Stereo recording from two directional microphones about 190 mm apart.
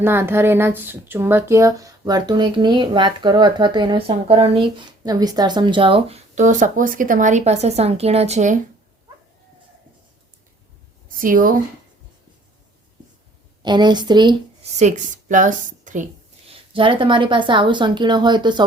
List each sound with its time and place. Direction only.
0.0 s speech: 10° right (ahead or behind); by 8.5 s 35° right (ahead or behind)
11.2 s speech: 45° right (ahead or behind)
13.6 s speech: 25° right (ahead or behind)
14.8 s a woman's voice: 40° right (ahead or behind)
16.5 s speech: 25° right (ahead or behind)